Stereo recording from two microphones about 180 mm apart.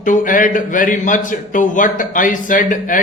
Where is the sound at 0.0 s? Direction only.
45° left (ahead or behind).